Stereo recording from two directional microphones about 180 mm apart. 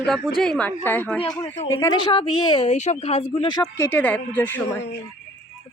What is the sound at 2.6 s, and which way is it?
Speech, 40° left (ahead or behind).